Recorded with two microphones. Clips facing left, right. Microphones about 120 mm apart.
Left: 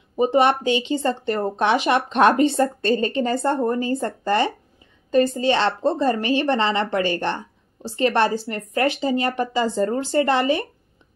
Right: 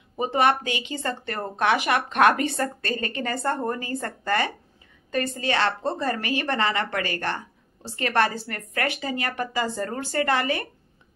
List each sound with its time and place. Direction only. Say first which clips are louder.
0.1 s a woman's voice: left 4 dB; 20° left (ahead or behind)